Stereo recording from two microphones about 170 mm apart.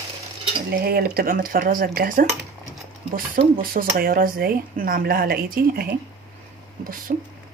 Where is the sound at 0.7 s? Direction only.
65° right (ahead or behind).